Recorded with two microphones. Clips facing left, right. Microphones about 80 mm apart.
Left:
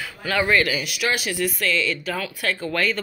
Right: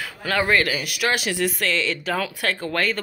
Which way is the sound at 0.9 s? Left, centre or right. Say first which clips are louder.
Right 1 dB; right.